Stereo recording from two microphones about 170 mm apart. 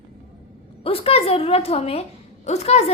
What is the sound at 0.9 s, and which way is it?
A woman's voice, 35° left (ahead or behind).